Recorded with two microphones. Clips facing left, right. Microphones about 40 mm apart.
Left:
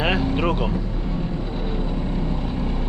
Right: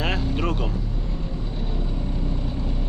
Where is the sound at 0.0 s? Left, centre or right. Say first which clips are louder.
Left 4 dB; centre.